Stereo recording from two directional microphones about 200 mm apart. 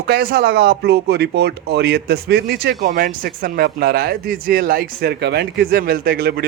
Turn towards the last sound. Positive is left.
turn(degrees=-50)  # may be behind; listen again after turning